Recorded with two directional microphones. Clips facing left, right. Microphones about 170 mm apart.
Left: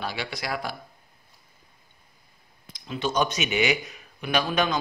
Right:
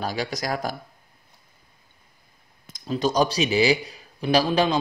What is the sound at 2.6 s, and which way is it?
A man's voice, 40° right (ahead or behind).